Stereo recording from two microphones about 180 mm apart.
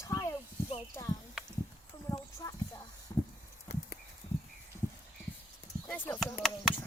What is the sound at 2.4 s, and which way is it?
Speech, 20° left (ahead or behind).